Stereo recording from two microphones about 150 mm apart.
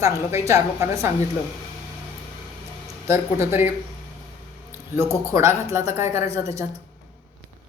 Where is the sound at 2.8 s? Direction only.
20° right (ahead or behind).